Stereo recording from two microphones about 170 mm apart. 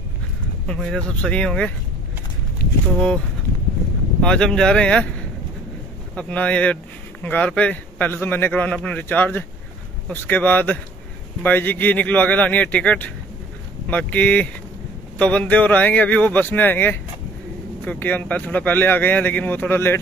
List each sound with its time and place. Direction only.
0.7 s speech: 5° left (ahead or behind)
4.2 s speech: 5° left (ahead or behind)
6.1 s speech: 10° left (ahead or behind)